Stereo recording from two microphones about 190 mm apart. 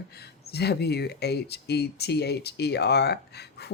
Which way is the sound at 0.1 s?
55° left (ahead or behind).